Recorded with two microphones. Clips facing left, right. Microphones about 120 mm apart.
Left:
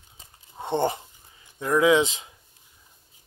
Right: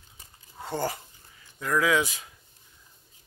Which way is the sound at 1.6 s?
20° left (ahead or behind).